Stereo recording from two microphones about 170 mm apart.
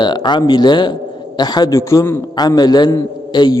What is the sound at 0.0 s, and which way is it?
A man's voice, 25° left (ahead or behind).